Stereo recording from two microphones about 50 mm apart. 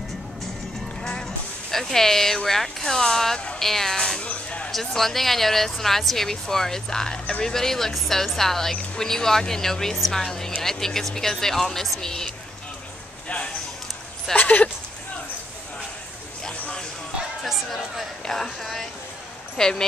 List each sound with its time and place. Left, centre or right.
1.0 s speech: centre
4.2 s a sound: left
4.6 s speech: centre
14.3 s speech: left
17.4 s speech: centre